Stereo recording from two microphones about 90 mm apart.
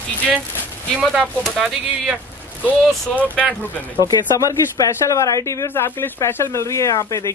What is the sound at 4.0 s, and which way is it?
Speech, 40° left (ahead or behind).